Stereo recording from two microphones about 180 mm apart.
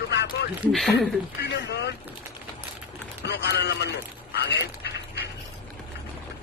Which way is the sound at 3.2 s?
75° left (ahead or behind).